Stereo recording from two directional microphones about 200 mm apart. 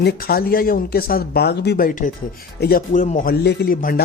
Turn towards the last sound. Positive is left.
turn(degrees=45)  # may be behind; listen again after turning